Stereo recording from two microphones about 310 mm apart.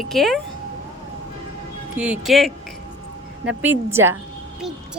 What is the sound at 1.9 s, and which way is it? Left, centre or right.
Speech, centre.